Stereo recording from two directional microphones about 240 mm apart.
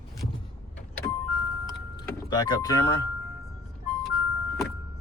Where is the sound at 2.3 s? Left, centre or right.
Centre.